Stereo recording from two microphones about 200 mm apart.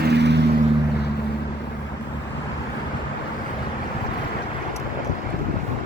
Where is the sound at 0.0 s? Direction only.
55° right (ahead or behind).